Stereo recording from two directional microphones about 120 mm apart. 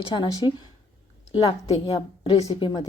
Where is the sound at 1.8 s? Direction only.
45° left (ahead or behind).